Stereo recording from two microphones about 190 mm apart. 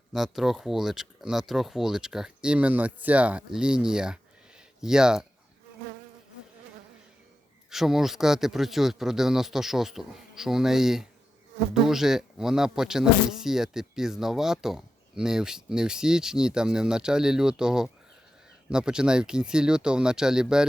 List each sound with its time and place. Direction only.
0.1 s speech: centre (ahead or behind)
7.7 s speech: centre (ahead or behind)